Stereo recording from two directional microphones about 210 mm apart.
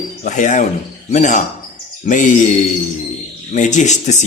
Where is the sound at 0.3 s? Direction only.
35° left (ahead or behind).